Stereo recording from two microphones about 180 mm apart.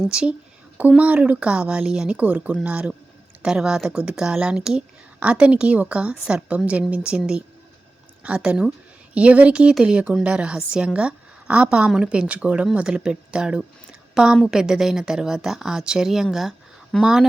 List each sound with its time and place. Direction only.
0.1 s a woman's voice: 5° right (ahead or behind)